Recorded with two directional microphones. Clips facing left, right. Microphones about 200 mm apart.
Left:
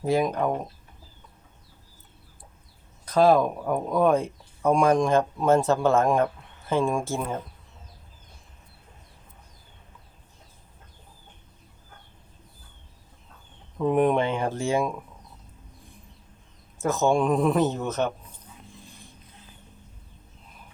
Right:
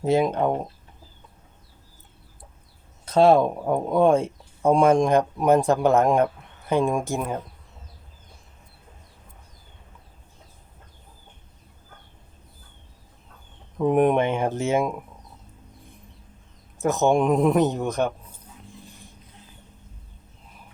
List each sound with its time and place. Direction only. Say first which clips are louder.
0.0 s speech: right 3 dB; 25° right (ahead or behind)
3.1 s speech: right 2 dB; 25° right (ahead or behind)
14.0 s speech: right 2 dB; 20° right (ahead or behind)
16.8 s a man's voice: right 2 dB; 20° right (ahead or behind)